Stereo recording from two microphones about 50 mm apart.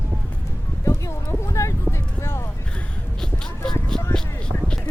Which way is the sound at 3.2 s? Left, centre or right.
Centre.